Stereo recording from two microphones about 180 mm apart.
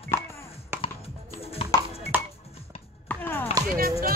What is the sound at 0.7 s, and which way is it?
Music, 10° right (ahead or behind).